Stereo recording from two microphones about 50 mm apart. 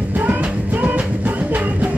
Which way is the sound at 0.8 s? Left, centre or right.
Right.